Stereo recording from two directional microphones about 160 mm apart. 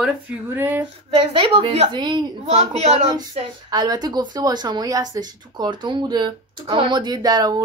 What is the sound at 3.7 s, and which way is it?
A woman's voice, 25° right (ahead or behind).